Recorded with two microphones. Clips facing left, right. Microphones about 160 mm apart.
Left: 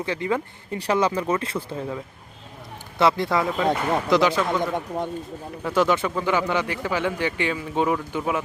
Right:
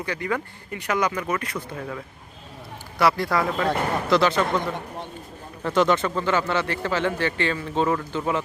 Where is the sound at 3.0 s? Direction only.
20° left (ahead or behind).